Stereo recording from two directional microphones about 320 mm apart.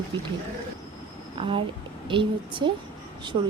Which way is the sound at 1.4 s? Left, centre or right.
Centre.